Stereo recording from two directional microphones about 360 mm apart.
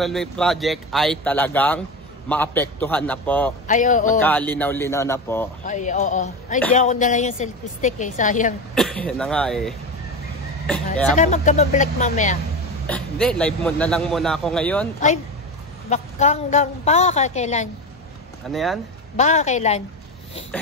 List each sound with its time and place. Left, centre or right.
0.0 s a man's voice: centre
3.6 s a woman's voice: left
4.2 s a man's voice: centre
5.6 s a woman's voice: left
8.7 s a man's voice: centre
11.1 s a woman's voice: centre
12.8 s a man's voice: centre
15.9 s a woman's voice: centre
18.5 s a man's voice: centre
19.1 s a woman's voice: centre